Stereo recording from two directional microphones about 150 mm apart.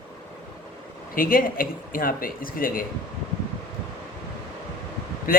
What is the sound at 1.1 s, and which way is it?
Speech, 70° left (ahead or behind).